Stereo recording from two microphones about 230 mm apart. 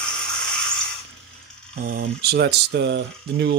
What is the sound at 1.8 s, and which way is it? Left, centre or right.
Speech, right.